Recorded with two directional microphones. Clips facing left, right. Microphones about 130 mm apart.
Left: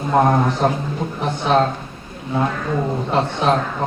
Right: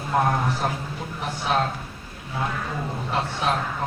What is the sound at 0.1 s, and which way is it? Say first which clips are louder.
A man's voice: left 7 dB; 45° left (ahead or behind).